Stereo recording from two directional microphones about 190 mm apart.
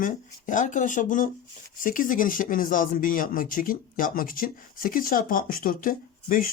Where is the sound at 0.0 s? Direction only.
45° left (ahead or behind).